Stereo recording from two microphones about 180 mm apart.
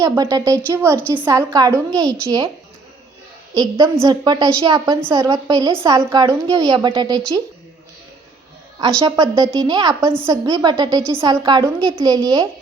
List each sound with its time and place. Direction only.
0.0 s a woman's voice: 20° right (ahead or behind)
3.5 s a woman's voice: 20° right (ahead or behind)
9.0 s a woman's voice: 20° right (ahead or behind)